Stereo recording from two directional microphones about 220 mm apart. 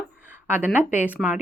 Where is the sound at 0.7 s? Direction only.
10° right (ahead or behind).